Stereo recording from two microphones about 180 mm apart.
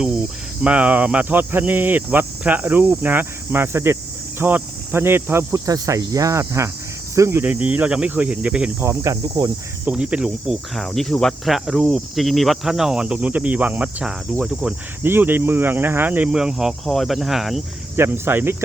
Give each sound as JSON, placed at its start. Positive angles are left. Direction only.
{"t": 0.6, "sound": "speech", "side_deg": -5}
{"t": 9.8, "sound": "speech", "side_deg": -5}
{"t": 17.9, "sound": "speech", "side_deg": -10}